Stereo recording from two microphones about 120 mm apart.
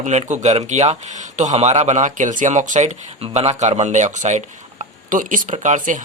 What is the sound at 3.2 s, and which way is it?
Speech, 60° right (ahead or behind).